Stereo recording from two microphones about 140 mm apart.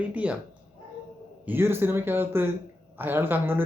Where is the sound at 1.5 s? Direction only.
15° right (ahead or behind).